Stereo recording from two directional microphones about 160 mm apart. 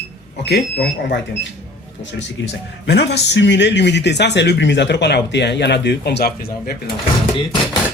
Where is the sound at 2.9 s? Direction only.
90° left.